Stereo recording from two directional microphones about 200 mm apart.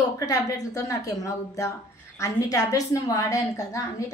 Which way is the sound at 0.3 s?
15° left (ahead or behind).